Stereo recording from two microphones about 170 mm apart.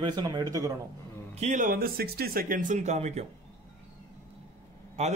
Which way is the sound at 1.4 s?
45° right (ahead or behind).